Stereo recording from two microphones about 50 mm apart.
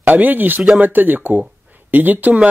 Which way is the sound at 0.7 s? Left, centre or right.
Right.